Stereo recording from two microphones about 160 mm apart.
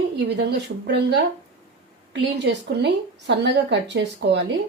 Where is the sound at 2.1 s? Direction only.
90° right.